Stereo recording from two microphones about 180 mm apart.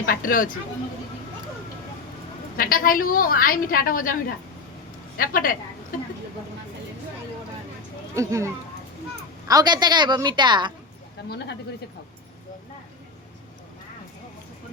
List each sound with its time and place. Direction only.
0.0 s a woman's voice: 50° left (ahead or behind)
2.6 s a woman's voice: 50° left (ahead or behind)
8.1 s a woman's voice: 15° right (ahead or behind)